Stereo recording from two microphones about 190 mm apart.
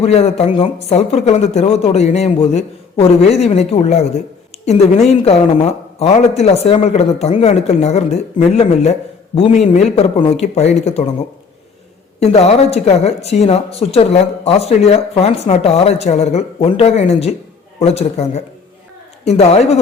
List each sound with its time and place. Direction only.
0.0 s speech: 35° left (ahead or behind)
12.2 s speech: 35° left (ahead or behind)